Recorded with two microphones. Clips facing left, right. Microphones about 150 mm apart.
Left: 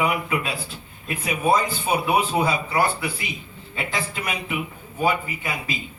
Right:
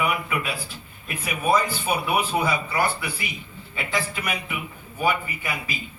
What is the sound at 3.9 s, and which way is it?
A man's voice, 25° left (ahead or behind).